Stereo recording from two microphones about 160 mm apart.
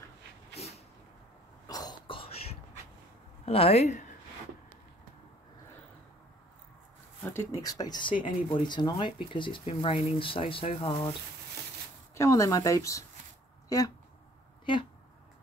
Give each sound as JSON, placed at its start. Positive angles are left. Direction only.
{"t": 1.7, "sound": "throat clearing", "side_deg": 25}
{"t": 3.4, "sound": "speech", "side_deg": 40}
{"t": 7.2, "sound": "speech", "side_deg": 15}
{"t": 12.2, "sound": "speech", "side_deg": 20}